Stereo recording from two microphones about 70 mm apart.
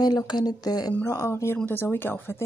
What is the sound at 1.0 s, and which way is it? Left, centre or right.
A woman's voice, left.